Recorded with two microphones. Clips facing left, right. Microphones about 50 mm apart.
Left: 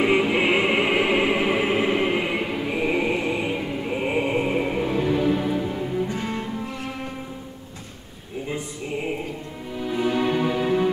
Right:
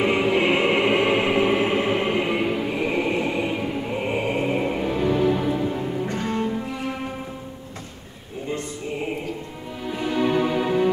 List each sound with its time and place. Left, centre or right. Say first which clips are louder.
0.0 s music: even; centre
6.1 s cello: right 3 dB; centre
9.8 s music: even; centre